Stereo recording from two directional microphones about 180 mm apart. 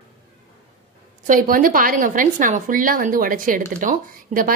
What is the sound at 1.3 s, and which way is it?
A woman's voice, 50° right (ahead or behind).